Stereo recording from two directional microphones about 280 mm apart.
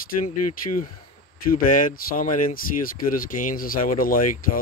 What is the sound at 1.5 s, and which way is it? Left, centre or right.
Speech, left.